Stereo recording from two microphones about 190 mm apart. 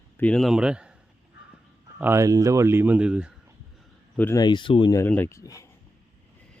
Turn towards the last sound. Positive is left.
turn(degrees=15)  # may be behind; listen again after turning